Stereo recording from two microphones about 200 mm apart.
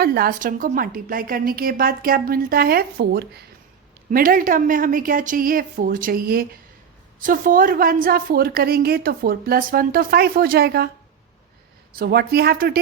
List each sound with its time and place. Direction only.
0.0 s a woman's voice: 50° right (ahead or behind)
11.9 s a woman's voice: 50° right (ahead or behind)